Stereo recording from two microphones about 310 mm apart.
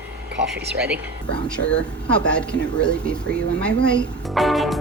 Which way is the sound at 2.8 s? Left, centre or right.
Centre.